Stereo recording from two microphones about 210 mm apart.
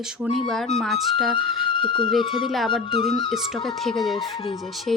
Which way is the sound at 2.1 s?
Centre (ahead or behind).